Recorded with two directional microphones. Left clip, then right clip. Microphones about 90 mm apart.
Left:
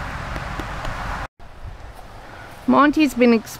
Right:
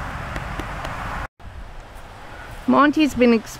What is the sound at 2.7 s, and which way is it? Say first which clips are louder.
Speech: left 1 dB; 15° left (ahead or behind).